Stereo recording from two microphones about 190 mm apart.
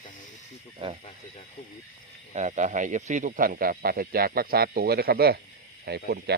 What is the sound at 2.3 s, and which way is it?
Speech, 40° right (ahead or behind).